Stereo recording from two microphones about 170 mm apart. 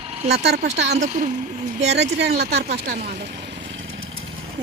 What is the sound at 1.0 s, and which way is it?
Speech, 45° right (ahead or behind).